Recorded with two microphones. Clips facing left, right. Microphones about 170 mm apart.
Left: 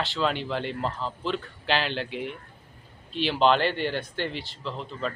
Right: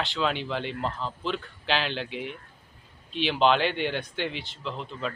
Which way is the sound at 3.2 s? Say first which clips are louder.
Left 1 dB; centre (ahead or behind).